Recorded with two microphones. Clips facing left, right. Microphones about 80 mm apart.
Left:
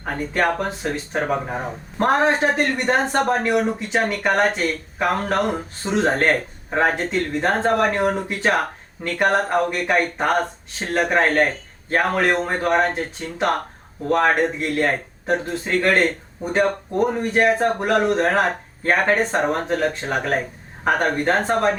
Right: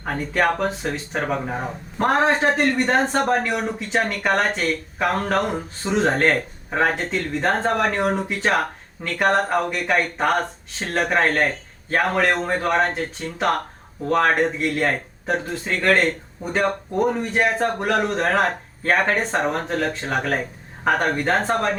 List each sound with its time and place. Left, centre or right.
0.0 s speech: centre
12.3 s a man's voice: left
12.6 s speech: centre